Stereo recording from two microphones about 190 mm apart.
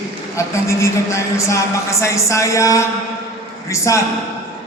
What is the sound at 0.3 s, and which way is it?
A man's voice, 15° left (ahead or behind).